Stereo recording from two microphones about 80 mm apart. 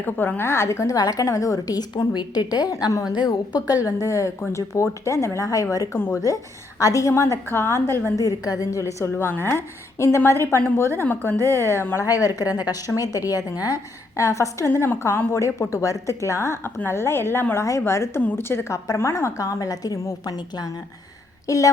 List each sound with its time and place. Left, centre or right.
0.0 s a woman's voice: left
8.2 s a woman's voice: left
12.0 s a woman's voice: left
18.2 s a woman's voice: left
21.4 s a woman's voice: left